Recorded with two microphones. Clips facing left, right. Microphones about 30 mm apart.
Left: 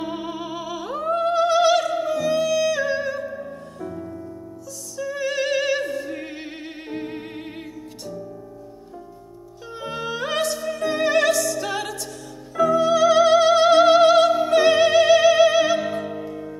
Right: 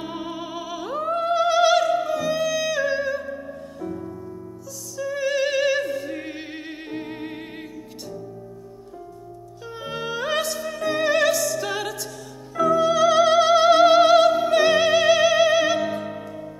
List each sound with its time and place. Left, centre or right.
0.0 s music: centre
4.9 s opera: centre
9.8 s music: centre